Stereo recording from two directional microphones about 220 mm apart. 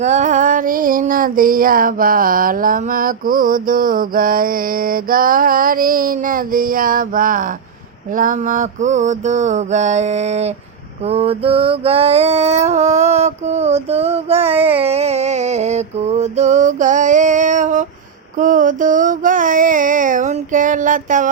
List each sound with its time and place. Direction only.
0.0 s music: 35° right (ahead or behind)
11.0 s mantra: 30° right (ahead or behind)
18.3 s music: 35° right (ahead or behind)